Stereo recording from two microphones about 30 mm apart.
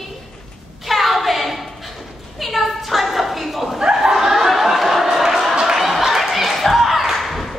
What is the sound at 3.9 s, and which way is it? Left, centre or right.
Snicker, centre.